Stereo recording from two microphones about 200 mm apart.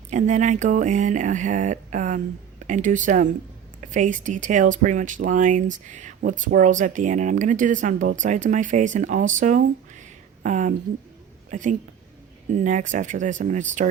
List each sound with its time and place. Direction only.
0.1 s speech: 35° right (ahead or behind)